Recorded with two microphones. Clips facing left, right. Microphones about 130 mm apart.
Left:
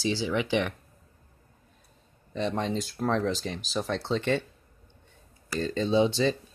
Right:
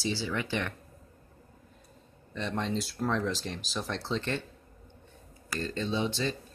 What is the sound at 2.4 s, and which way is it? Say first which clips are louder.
Speech: left 3 dB; 5° left (ahead or behind).